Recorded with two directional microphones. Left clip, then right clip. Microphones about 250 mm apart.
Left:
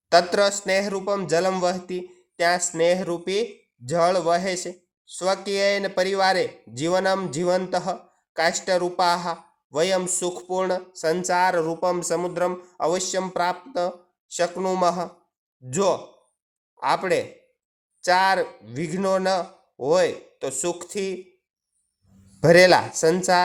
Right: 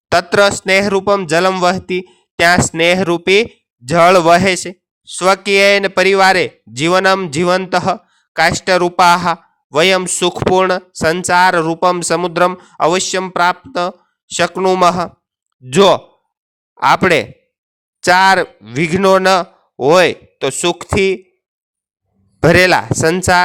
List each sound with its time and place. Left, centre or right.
0.1 s speech: right
12.3 s speech: right
12.6 s speech: right
15.6 s speech: right
22.4 s speech: right